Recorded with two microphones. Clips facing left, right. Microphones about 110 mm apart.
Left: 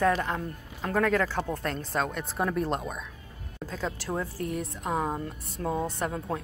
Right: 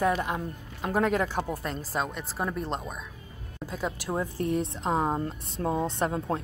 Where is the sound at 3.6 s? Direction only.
10° right (ahead or behind).